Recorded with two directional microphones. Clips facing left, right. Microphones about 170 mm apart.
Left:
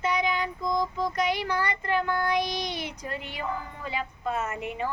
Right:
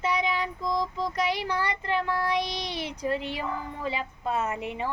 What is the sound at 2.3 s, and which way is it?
Female singing, 30° right (ahead or behind).